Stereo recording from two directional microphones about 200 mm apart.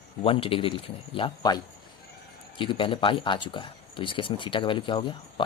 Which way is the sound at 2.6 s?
25° left (ahead or behind).